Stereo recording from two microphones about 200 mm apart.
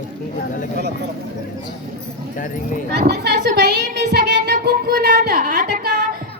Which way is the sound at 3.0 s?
55° right (ahead or behind).